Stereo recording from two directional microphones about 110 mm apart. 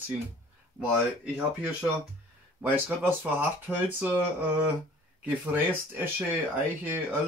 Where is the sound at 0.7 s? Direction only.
15° right (ahead or behind).